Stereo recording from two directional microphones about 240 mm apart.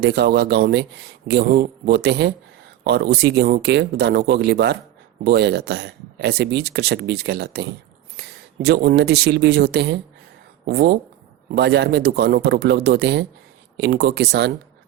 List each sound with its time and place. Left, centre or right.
0.0 s speech: right